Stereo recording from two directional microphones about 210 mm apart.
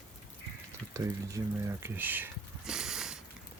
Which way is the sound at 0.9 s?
15° right (ahead or behind).